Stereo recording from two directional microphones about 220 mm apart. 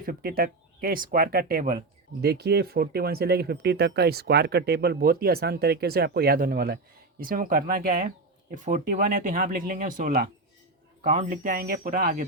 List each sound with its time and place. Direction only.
0.0 s speech: 40° right (ahead or behind)